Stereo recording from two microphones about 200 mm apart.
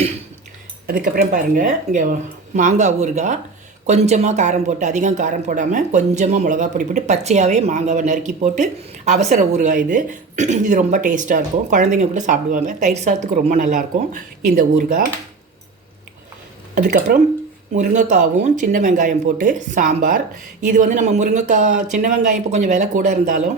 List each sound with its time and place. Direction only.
0.9 s speech: 45° right (ahead or behind)
16.7 s speech: 45° right (ahead or behind)